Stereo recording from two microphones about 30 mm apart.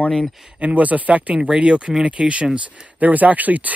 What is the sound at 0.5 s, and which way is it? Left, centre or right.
Speech, right.